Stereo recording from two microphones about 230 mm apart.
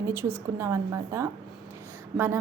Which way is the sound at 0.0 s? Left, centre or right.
Centre.